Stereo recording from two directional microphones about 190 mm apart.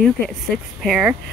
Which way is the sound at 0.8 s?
5° right (ahead or behind).